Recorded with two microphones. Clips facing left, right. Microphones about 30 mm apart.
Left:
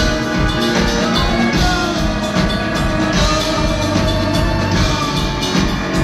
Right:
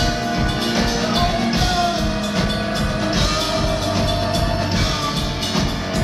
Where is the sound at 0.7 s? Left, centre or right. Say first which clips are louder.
Left 3 dB; left.